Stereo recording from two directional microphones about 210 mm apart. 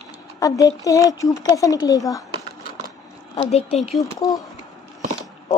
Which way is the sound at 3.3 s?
30° left (ahead or behind).